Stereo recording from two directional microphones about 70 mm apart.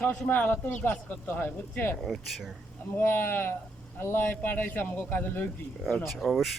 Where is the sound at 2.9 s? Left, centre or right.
Left.